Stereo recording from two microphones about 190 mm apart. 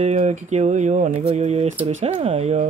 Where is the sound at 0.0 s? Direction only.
35° right (ahead or behind).